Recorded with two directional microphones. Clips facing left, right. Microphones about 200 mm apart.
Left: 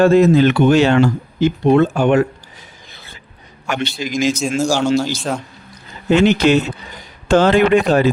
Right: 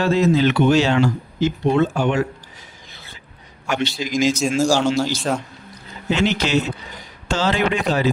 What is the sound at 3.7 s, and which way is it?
Speech, 55° left (ahead or behind).